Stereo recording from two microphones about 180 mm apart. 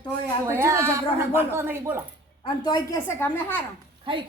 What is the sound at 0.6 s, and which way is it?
Speech, 15° right (ahead or behind).